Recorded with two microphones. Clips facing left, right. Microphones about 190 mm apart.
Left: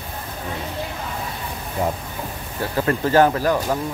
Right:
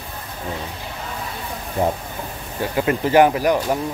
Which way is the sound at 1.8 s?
25° right (ahead or behind).